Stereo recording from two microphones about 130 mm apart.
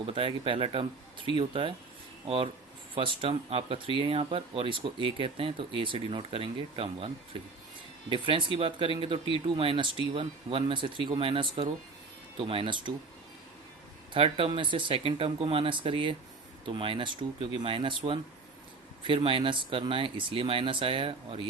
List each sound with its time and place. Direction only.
0.0 s speech: 40° right (ahead or behind)
8.1 s speech: 40° right (ahead or behind)
14.1 s speech: 45° right (ahead or behind)